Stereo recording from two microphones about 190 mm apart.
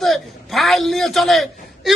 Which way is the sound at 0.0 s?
Centre (ahead or behind).